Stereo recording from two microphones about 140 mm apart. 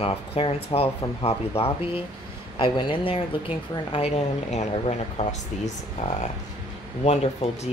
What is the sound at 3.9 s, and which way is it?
Speech, 50° left (ahead or behind).